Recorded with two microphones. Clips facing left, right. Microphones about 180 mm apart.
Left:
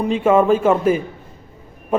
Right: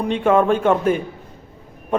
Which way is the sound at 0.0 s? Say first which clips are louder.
Left 2 dB; 5° left (ahead or behind).